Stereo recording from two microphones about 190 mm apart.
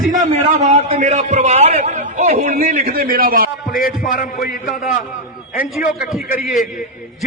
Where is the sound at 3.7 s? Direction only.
50° left (ahead or behind).